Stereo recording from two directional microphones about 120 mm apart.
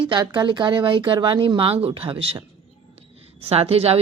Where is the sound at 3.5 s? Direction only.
55° right (ahead or behind).